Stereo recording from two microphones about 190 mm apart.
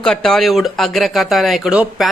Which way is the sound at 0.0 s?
5° left (ahead or behind).